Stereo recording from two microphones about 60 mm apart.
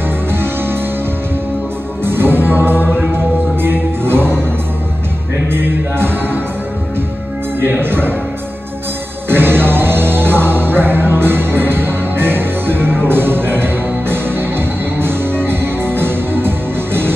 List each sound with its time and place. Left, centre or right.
0.3 s music: right
2.0 s music: right
2.8 s music: left
3.6 s music: right
5.5 s music: right
7.7 s speech: right
9.3 s music: right